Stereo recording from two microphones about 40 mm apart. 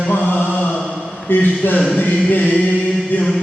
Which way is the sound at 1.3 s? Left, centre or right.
Left.